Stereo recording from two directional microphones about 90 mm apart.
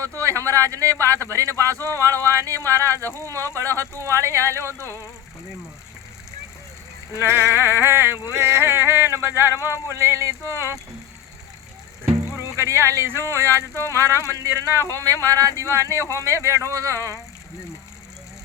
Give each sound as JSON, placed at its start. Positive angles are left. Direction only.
{"t": 0.2, "sound": "speech", "side_deg": -35}
{"t": 4.8, "sound": "speech", "side_deg": 30}
{"t": 7.2, "sound": "a sound", "side_deg": -25}
{"t": 12.0, "sound": "music", "side_deg": -30}
{"t": 13.2, "sound": "speech", "side_deg": -35}